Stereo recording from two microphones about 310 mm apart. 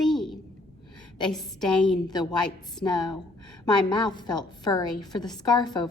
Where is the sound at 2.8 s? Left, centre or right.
Centre.